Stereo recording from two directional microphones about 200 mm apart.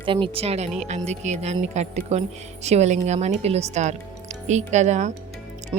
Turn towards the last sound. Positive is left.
turn(degrees=-30)  # may be behind; listen again after turning